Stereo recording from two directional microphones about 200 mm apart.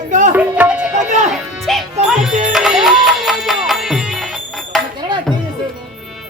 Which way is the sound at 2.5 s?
Centre (ahead or behind).